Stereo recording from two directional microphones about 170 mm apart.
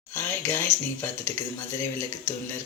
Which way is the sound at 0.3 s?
15° left (ahead or behind).